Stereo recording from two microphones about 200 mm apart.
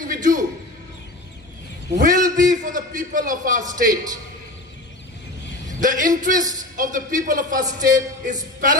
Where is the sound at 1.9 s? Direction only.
40° right (ahead or behind).